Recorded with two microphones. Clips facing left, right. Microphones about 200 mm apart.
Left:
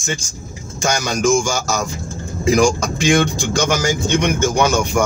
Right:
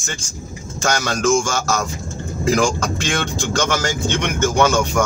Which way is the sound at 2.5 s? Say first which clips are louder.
Left 4 dB; 10° left (ahead or behind).